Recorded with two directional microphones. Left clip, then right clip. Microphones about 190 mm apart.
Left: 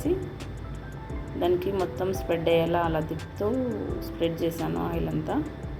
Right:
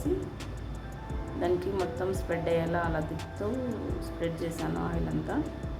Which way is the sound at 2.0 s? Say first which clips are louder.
Left 4 dB; 15° left (ahead or behind).